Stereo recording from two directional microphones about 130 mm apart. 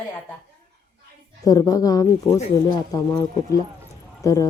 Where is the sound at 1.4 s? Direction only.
25° left (ahead or behind).